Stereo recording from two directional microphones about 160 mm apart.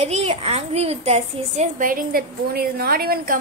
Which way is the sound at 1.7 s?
60° right (ahead or behind).